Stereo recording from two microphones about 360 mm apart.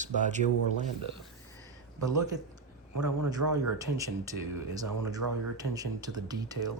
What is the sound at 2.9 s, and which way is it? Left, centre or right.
Speech, right.